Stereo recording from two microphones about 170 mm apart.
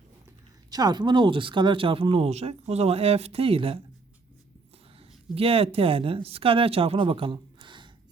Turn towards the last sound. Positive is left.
turn(degrees=-25)  # may be behind; listen again after turning